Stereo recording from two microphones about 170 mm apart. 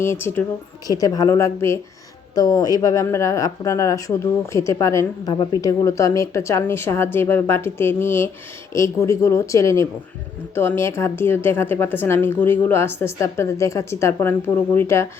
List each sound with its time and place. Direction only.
0.0 s a woman's voice: 15° left (ahead or behind)